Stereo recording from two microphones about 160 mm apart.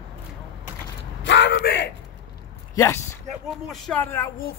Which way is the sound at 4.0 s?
15° left (ahead or behind).